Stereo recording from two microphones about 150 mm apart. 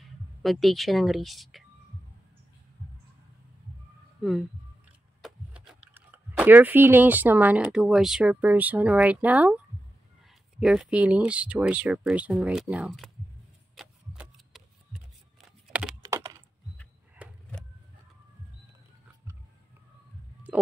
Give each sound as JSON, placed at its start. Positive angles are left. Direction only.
{"t": 0.4, "sound": "speech", "side_deg": 0}
{"t": 5.2, "sound": "speech", "side_deg": -5}
{"t": 10.6, "sound": "speech", "side_deg": -5}
{"t": 13.7, "sound": "a sound", "side_deg": -5}
{"t": 15.7, "sound": "computer keyboard", "side_deg": -5}
{"t": 16.0, "sound": "computer keyboard", "side_deg": -20}